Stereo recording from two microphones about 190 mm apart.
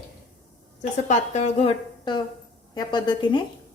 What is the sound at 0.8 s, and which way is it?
A woman's voice, 40° left (ahead or behind).